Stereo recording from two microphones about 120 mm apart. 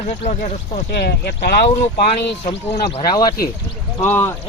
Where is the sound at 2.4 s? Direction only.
60° left (ahead or behind).